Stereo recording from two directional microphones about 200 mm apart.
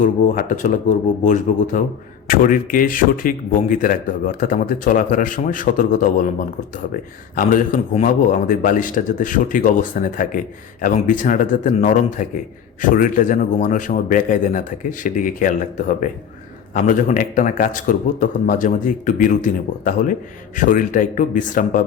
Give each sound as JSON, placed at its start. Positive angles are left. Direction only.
{"t": 0.0, "sound": "a man's voice", "side_deg": 40}
{"t": 7.3, "sound": "a man's voice", "side_deg": 40}